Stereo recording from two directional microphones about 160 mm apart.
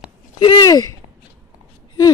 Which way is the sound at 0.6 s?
25° left (ahead or behind).